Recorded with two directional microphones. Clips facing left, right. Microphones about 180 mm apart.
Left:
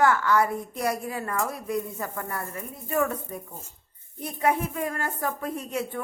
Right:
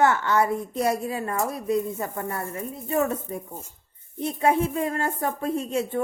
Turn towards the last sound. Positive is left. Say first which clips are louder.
# right 5 dB
turn(degrees=-25)  # may be behind; listen again after turning